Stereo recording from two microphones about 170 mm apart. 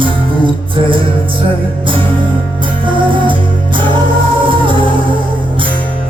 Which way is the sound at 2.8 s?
30° right (ahead or behind).